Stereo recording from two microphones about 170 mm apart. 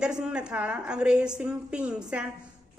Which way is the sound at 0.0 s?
5° right (ahead or behind).